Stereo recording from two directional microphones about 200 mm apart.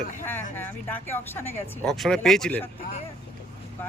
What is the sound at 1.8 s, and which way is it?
Speech, centre (ahead or behind).